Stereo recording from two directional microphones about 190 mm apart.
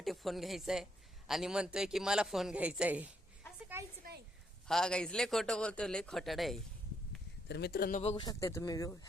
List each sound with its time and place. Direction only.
0.0 s a man's voice: centre (ahead or behind)
4.7 s a man's voice: 5° left (ahead or behind)
7.4 s speech: 60° left (ahead or behind)
8.0 s speech: 25° left (ahead or behind)